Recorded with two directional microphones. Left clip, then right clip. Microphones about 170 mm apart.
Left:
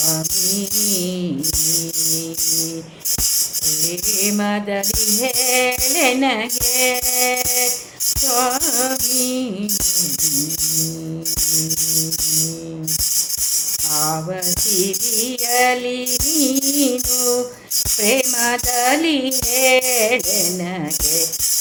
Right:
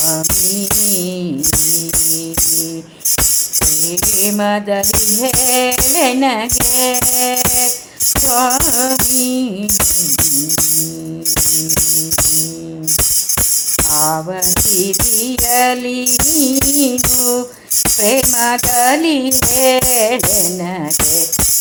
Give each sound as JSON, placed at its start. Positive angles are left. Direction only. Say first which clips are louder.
{"t": 4.2, "sound": "music", "louder": "right 5 dB", "side_deg": -15}
{"t": 15.5, "sound": "music", "louder": "right 2 dB", "side_deg": -15}